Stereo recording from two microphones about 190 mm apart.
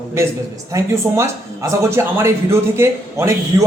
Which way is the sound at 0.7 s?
15° right (ahead or behind).